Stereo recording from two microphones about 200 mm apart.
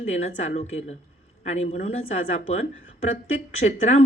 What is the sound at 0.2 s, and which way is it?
Speech, 35° left (ahead or behind).